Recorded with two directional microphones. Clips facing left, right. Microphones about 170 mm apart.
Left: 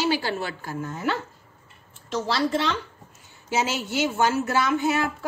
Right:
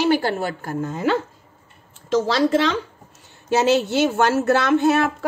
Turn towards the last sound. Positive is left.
turn(degrees=-65)  # may be behind; listen again after turning